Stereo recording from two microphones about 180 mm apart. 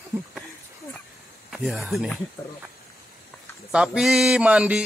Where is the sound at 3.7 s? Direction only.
5° right (ahead or behind).